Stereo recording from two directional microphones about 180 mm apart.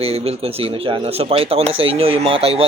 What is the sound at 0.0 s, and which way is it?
A man's voice, 35° right (ahead or behind).